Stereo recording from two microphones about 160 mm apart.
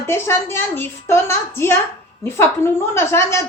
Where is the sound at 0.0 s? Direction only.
15° left (ahead or behind).